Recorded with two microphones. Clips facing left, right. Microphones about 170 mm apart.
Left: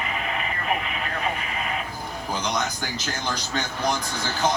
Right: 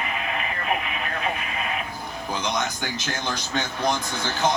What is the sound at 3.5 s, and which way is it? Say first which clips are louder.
Speech: right 2 dB; 20° right (ahead or behind).